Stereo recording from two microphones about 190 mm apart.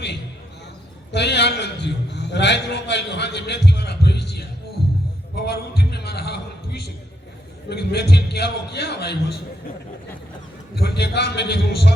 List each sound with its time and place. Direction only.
1.1 s a man's voice: 65° left (ahead or behind)
10.8 s a man's voice: 60° left (ahead or behind)